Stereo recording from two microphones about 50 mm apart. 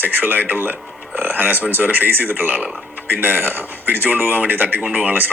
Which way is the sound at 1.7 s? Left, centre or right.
Right.